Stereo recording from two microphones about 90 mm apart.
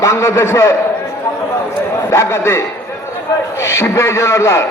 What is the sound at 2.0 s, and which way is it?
A man's voice, 35° left (ahead or behind).